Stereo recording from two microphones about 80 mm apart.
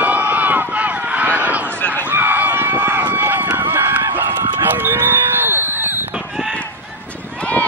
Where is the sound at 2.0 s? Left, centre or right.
Right.